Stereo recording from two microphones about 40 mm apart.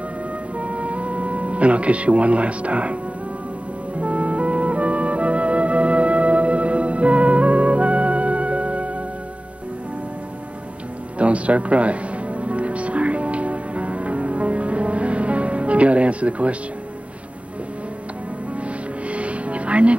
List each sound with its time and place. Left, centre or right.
0.6 s music: right
4.0 s music: right
11.1 s music: right
18.6 s music: right